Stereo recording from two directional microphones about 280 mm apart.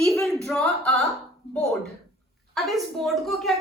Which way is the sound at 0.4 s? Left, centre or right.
Centre.